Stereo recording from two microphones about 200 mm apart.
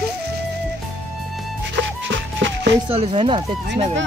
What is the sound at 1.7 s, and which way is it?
Music, 65° right (ahead or behind).